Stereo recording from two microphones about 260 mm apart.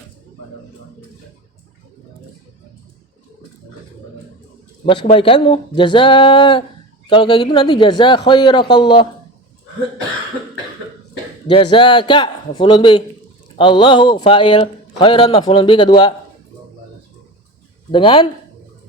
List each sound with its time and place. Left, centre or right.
4.9 s a man's voice: left
11.4 s a man's voice: centre
17.9 s speech: centre